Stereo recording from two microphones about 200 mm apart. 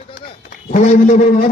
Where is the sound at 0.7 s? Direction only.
40° left (ahead or behind).